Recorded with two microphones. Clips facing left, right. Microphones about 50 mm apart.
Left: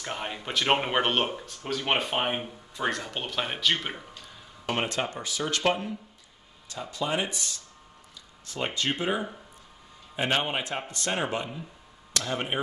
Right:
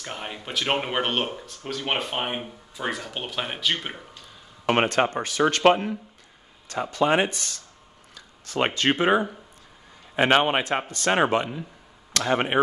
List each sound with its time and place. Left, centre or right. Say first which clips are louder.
0.0 s speech: left 1 dB; centre
4.6 s a man's voice: right 8 dB; right